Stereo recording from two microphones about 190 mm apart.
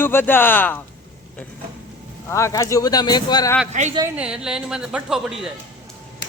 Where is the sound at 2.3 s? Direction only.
15° left (ahead or behind).